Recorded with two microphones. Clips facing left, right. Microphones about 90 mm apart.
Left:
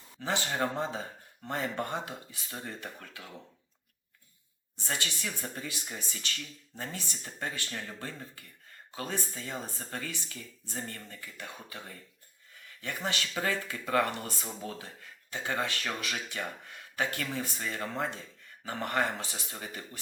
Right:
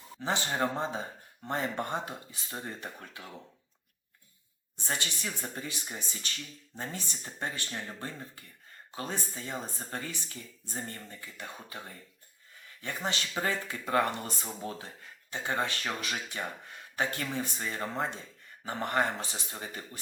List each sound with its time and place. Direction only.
0.2 s speech: 20° right (ahead or behind)
4.8 s speech: 20° right (ahead or behind)